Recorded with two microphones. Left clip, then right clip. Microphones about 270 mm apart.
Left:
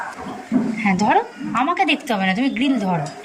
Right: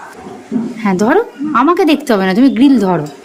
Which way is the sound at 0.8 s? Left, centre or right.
Centre.